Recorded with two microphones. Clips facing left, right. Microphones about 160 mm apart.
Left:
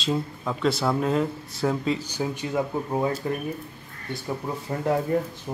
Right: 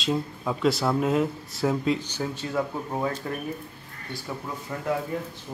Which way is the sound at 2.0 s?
15° left (ahead or behind).